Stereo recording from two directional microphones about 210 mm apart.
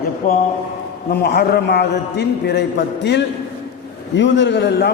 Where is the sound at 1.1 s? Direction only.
50° left (ahead or behind).